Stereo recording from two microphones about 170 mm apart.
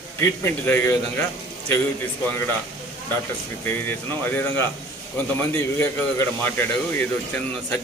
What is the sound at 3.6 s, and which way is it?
A man's voice, 10° left (ahead or behind).